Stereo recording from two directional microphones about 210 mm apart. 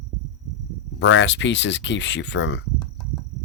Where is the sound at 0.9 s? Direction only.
65° left (ahead or behind).